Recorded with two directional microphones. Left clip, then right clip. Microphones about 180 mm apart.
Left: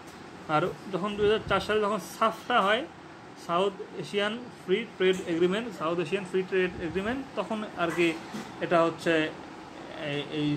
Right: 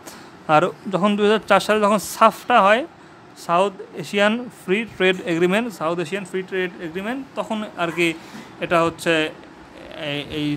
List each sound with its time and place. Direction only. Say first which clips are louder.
0.5 s a man's voice: right 11 dB; 45° right (ahead or behind)